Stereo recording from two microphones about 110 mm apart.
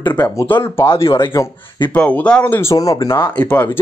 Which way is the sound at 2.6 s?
30° left (ahead or behind).